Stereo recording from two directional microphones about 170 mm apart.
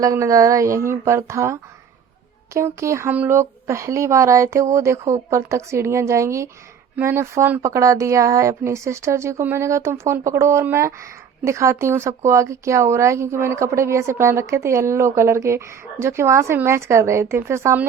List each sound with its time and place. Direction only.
0.0 s speech: 20° right (ahead or behind)